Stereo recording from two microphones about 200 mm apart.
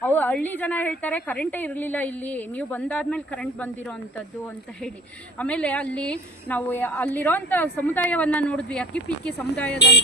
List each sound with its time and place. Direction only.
0.0 s a woman's voice: 10° left (ahead or behind)
5.4 s a woman's voice: 5° left (ahead or behind)
9.7 s speech: 55° left (ahead or behind)